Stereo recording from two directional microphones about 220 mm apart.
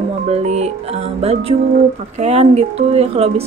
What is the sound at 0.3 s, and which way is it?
Speech, 30° right (ahead or behind).